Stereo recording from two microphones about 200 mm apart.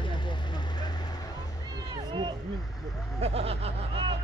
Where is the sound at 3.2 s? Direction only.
30° right (ahead or behind).